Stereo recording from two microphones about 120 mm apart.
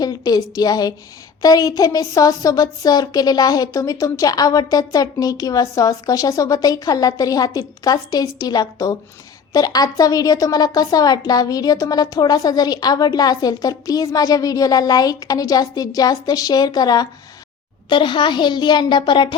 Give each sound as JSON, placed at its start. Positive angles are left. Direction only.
{"t": 0.0, "sound": "speech", "side_deg": 35}